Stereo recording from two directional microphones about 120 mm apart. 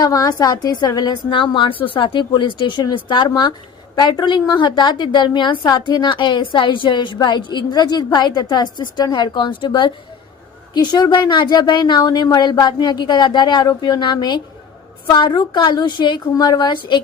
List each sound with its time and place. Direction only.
0.0 s a woman's voice: 30° left (ahead or behind)